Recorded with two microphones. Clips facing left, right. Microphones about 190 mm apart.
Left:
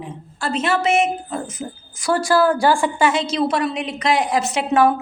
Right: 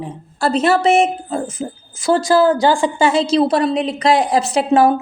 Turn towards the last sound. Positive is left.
turn(degrees=-30)  # may be behind; listen again after turning